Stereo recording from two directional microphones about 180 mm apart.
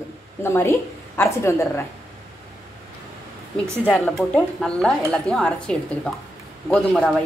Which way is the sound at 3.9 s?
5° left (ahead or behind).